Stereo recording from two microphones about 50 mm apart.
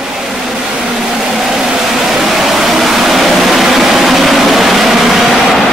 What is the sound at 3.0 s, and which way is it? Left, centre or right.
Vehicle, centre.